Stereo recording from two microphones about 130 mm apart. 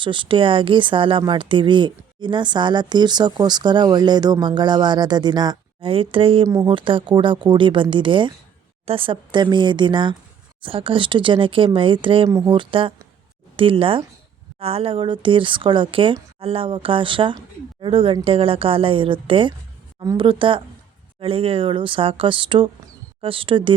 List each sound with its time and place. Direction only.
0.0 s speech: 40° right (ahead or behind)